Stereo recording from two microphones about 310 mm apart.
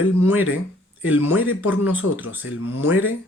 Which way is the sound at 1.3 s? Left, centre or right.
Left.